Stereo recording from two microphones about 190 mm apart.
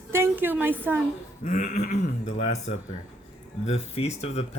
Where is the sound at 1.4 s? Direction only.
40° left (ahead or behind).